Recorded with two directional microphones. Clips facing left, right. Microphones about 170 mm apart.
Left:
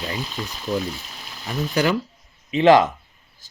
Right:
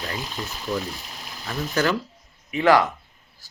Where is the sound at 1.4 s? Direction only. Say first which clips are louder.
Left 2 dB; 15° left (ahead or behind).